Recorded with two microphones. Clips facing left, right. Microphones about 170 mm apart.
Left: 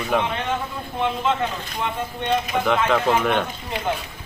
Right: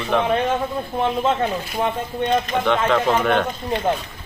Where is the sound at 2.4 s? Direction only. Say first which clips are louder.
Right 1 dB; 5° left (ahead or behind).